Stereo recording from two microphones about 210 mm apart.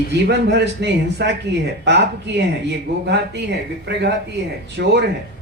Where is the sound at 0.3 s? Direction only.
55° right (ahead or behind).